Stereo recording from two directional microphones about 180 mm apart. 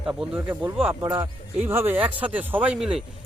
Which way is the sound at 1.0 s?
20° right (ahead or behind).